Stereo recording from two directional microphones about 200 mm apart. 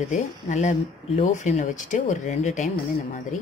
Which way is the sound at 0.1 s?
35° left (ahead or behind).